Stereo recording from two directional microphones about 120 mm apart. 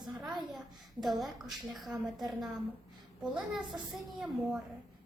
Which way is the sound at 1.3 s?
Centre (ahead or behind).